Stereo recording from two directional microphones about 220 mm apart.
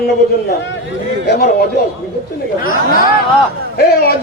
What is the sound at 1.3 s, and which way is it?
Speech, 45° left (ahead or behind).